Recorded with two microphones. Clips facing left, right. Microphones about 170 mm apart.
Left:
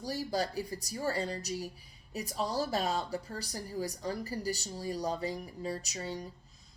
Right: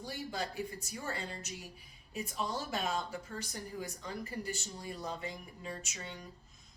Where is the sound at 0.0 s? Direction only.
35° left (ahead or behind).